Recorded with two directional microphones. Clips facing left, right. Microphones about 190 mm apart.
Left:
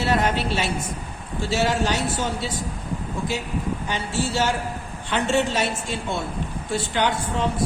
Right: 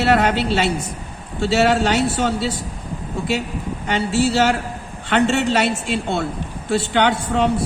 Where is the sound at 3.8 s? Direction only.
70° right (ahead or behind).